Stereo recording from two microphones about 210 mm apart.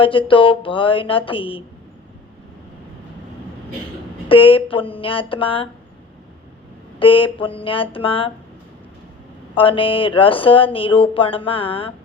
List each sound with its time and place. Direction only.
0.0 s speech: 25° left (ahead or behind)
4.3 s speech: 25° left (ahead or behind)
7.0 s speech: 25° left (ahead or behind)
9.6 s speech: 25° left (ahead or behind)